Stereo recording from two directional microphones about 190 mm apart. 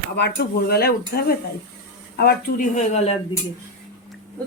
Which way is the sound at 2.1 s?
50° left (ahead or behind).